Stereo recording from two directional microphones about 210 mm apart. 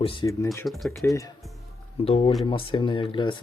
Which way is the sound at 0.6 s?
Centre (ahead or behind).